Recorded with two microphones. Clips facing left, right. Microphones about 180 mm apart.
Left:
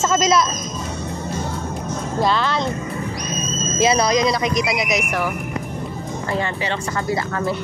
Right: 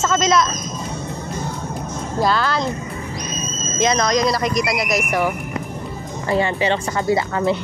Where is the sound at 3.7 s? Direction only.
5° left (ahead or behind).